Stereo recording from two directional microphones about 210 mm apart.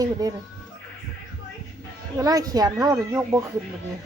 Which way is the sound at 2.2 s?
15° right (ahead or behind).